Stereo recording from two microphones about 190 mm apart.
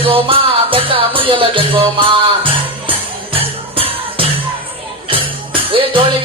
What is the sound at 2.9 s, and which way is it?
Music, 30° right (ahead or behind).